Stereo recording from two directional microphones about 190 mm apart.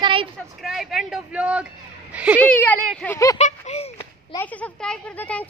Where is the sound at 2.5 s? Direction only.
10° left (ahead or behind).